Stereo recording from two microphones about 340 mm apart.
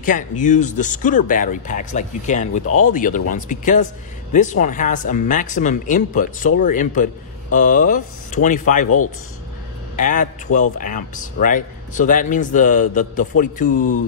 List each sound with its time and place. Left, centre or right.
0.0 s speech: left
8.8 s speech: left
9.9 s speech: left